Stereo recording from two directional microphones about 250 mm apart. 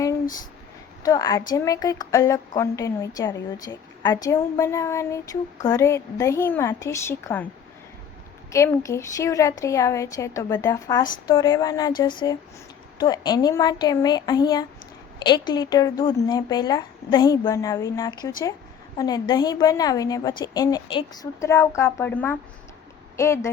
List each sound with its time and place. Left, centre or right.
1.0 s speech: centre
8.5 s speech: centre